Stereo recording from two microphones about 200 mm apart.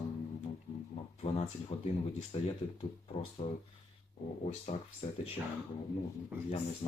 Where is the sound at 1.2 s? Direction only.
30° left (ahead or behind).